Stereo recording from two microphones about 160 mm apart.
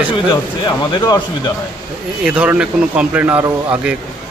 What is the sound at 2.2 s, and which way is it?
Speech, 10° right (ahead or behind).